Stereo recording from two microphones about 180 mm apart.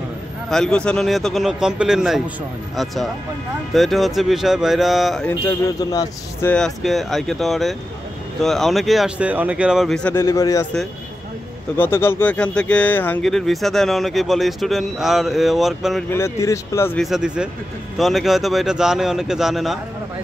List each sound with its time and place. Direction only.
0.5 s speech: 5° left (ahead or behind)
5.3 s a man's voice: 20° left (ahead or behind)
6.5 s speech: centre (ahead or behind)
10.1 s speech: 15° left (ahead or behind)
11.7 s speech: 10° left (ahead or behind)
16.1 s speech: 15° left (ahead or behind)
17.0 s speech: 5° right (ahead or behind)